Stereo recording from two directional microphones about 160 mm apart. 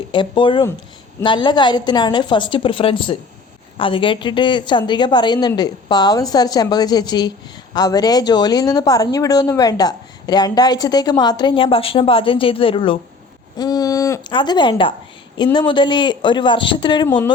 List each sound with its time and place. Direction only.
0.1 s a woman's voice: 30° left (ahead or behind)